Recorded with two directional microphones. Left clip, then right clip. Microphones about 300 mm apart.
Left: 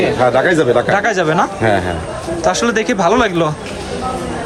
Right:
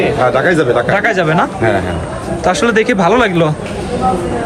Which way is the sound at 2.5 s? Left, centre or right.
Centre.